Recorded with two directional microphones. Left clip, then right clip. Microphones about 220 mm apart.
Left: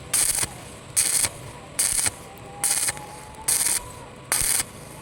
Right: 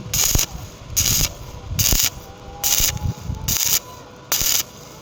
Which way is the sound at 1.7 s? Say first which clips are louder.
Right 7 dB; 10° left (ahead or behind).